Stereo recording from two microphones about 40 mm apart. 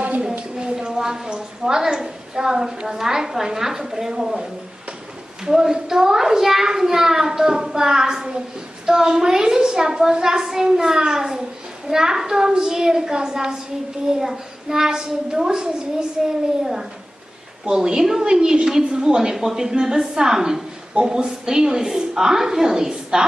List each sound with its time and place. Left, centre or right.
0.6 s a woman's voice: right
17.6 s a child's voice: centre